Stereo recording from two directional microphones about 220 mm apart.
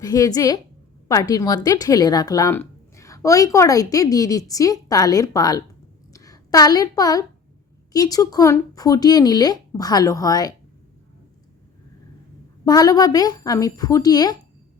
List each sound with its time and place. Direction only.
0.0 s a woman's voice: 15° left (ahead or behind)
12.6 s speech: 15° left (ahead or behind)